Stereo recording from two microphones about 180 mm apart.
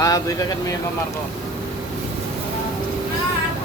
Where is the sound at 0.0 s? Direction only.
20° left (ahead or behind).